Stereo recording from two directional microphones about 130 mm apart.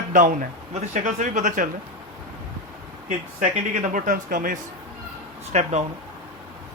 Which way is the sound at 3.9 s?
90° right.